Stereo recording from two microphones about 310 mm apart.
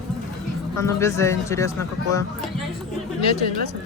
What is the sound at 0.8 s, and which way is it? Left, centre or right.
Speech, centre.